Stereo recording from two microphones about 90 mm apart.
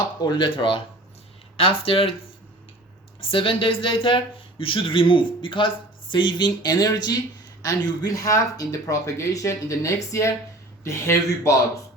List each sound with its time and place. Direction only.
0.2 s speech: 55° left (ahead or behind)
1.5 s speech: 90° left
3.2 s speech: 75° left (ahead or behind); by 11.5 s 30° left (ahead or behind)